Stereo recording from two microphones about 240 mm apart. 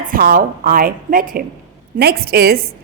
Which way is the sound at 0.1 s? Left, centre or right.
Right.